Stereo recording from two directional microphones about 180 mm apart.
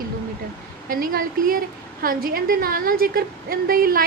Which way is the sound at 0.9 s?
50° right (ahead or behind).